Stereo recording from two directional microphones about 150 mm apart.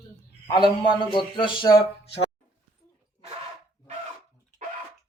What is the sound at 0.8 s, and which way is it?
Speech, 35° left (ahead or behind).